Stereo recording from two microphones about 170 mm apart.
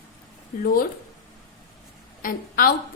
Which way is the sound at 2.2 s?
55° left (ahead or behind).